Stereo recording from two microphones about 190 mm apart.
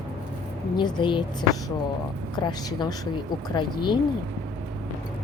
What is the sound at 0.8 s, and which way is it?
A woman's voice, 25° left (ahead or behind).